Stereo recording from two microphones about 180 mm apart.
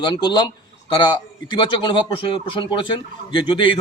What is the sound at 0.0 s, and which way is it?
A man's voice, 25° left (ahead or behind).